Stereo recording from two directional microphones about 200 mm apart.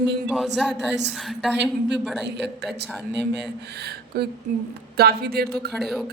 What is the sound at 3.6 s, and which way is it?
Speech, 55° right (ahead or behind).